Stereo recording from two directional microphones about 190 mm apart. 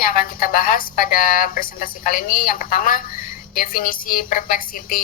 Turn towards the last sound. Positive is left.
turn(degrees=50)  # may be behind; listen again after turning